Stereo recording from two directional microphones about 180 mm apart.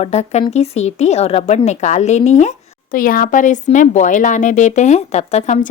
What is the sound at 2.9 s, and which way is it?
A woman's voice, 50° left (ahead or behind).